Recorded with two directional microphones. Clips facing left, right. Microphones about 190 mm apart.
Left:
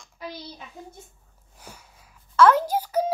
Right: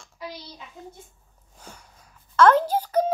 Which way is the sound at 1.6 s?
10° left (ahead or behind).